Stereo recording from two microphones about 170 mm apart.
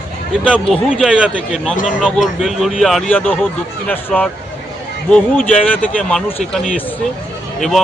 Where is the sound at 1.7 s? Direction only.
50° left (ahead or behind).